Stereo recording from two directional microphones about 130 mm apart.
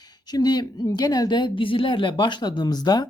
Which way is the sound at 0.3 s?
30° left (ahead or behind).